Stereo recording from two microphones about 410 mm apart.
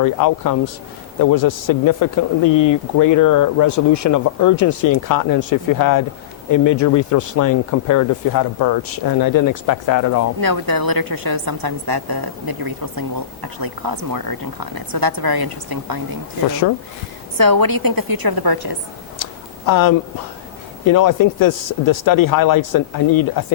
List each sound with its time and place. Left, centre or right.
0.0 s speech: left
10.4 s a woman's voice: right
17.3 s a woman's voice: right
19.2 s a sound: left
20.8 s speech: left